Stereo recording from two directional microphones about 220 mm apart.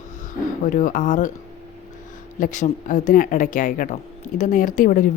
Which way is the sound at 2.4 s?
35° left (ahead or behind).